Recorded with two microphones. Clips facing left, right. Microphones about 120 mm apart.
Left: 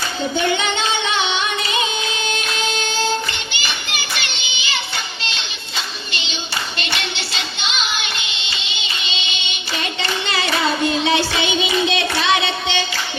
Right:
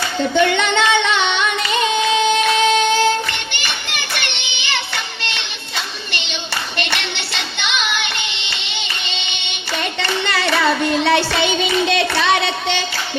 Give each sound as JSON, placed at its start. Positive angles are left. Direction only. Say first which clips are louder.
{"t": 0.3, "sound": "music", "louder": "right 5 dB", "side_deg": -65}
{"t": 4.2, "sound": "child singing", "louder": "right 1 dB", "side_deg": -60}
{"t": 6.7, "sound": "music", "louder": "right 2 dB", "side_deg": -60}